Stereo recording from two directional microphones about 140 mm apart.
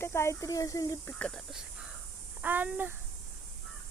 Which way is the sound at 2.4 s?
10° right (ahead or behind).